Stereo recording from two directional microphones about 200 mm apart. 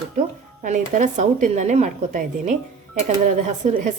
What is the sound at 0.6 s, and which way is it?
A woman's voice, 40° right (ahead or behind).